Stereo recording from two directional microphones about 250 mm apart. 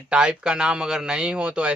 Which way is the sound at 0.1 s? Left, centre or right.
Centre.